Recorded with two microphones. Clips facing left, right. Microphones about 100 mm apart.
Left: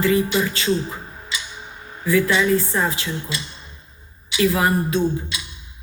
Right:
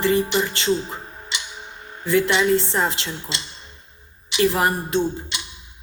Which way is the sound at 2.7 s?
25° right (ahead or behind).